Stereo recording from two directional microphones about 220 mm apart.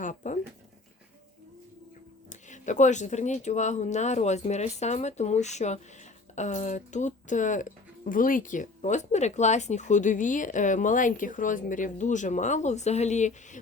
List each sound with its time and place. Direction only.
0.0 s speech: 35° left (ahead or behind)
2.5 s speech: 35° left (ahead or behind)